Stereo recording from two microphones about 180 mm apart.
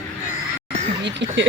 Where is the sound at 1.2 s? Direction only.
80° right.